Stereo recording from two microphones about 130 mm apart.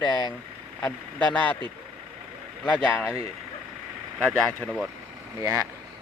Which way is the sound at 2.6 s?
5° left (ahead or behind).